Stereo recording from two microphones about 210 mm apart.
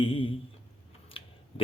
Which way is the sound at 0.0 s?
25° left (ahead or behind).